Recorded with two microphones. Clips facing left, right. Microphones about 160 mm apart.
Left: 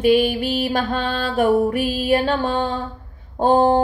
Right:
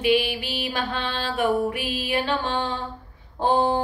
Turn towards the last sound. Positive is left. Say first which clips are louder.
# left 6 dB
turn(degrees=40)  # may be behind; listen again after turning